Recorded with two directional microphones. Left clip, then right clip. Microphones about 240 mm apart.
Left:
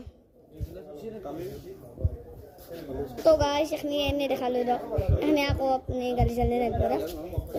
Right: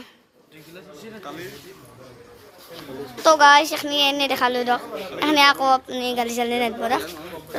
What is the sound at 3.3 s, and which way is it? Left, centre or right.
A woman's voice, centre.